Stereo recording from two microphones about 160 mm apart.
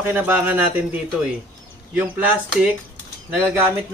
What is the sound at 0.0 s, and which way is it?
Speech, 10° right (ahead or behind).